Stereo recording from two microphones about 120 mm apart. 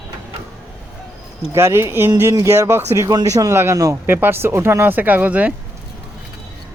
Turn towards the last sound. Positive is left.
turn(degrees=-10)  # may be behind; listen again after turning